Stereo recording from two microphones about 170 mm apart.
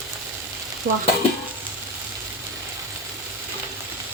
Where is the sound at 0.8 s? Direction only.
70° right (ahead or behind).